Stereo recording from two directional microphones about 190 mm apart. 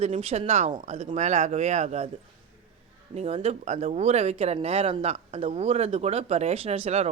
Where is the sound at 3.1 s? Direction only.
35° right (ahead or behind).